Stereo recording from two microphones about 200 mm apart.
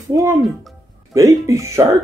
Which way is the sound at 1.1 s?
15° right (ahead or behind).